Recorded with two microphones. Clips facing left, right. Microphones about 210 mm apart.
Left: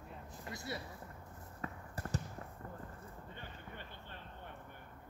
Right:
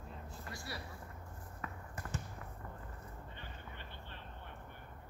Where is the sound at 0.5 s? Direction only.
20° left (ahead or behind).